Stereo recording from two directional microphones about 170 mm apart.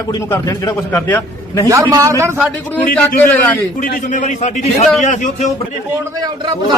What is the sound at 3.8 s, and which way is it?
A man's voice, 50° left (ahead or behind).